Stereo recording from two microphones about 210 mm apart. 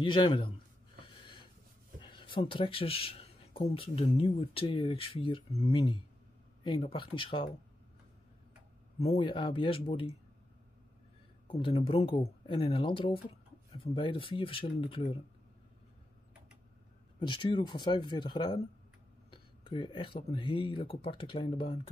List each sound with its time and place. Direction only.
0.0 s speech: 25° left (ahead or behind)
2.0 s speech: 25° left (ahead or behind)
9.0 s speech: 25° left (ahead or behind)
11.4 s speech: 25° left (ahead or behind)
17.2 s speech: 20° left (ahead or behind)